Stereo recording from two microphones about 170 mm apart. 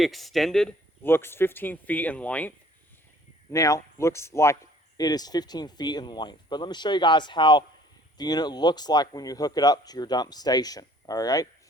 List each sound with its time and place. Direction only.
0.0 s speech: centre (ahead or behind)
3.5 s speech: 20° left (ahead or behind)